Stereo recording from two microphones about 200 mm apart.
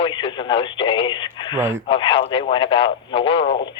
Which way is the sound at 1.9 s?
25° left (ahead or behind).